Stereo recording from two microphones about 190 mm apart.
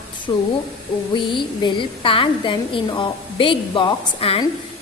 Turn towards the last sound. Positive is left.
turn(degrees=25)  # may be behind; listen again after turning